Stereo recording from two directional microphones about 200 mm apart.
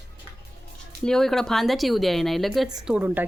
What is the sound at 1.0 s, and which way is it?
Speech, centre (ahead or behind).